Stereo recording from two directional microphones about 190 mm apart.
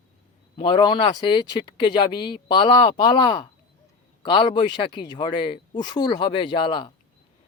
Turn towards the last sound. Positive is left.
turn(degrees=25)  # may be behind; listen again after turning